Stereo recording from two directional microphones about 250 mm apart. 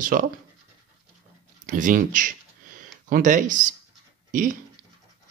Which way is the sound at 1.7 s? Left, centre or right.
Right.